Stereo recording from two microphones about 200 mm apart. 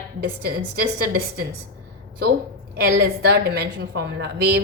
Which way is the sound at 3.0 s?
55° right (ahead or behind).